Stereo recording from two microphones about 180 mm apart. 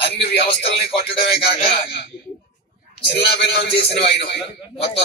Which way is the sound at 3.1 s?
65° left (ahead or behind).